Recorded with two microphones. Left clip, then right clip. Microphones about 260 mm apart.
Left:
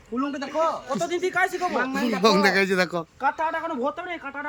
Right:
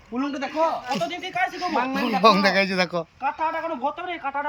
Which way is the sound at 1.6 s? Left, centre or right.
Centre.